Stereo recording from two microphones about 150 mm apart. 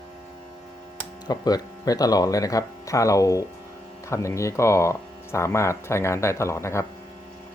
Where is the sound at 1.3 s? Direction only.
25° left (ahead or behind).